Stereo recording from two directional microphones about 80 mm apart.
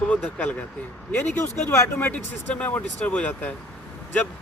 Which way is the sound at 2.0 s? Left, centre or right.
Centre.